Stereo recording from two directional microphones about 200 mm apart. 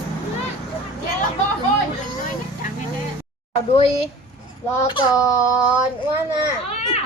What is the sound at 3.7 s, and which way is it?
Speech, 30° left (ahead or behind).